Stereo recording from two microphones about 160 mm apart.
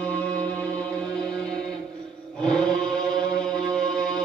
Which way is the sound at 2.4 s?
5° left (ahead or behind).